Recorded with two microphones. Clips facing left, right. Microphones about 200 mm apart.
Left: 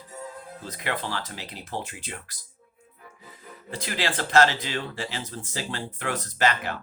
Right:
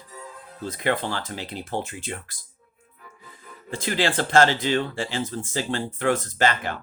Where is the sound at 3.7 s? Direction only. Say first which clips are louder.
Right 5 dB; 25° right (ahead or behind).